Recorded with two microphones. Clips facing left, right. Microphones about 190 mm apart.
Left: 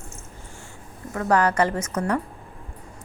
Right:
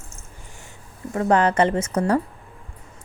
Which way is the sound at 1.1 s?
25° right (ahead or behind).